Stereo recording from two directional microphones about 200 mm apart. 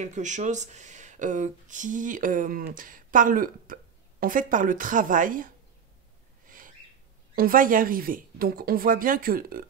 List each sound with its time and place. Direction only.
0.0 s speech: 35° right (ahead or behind)
6.4 s owl: 45° right (ahead or behind)
7.3 s speech: 45° right (ahead or behind)